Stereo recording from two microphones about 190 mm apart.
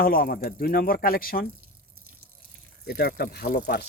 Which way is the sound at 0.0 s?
50° left (ahead or behind).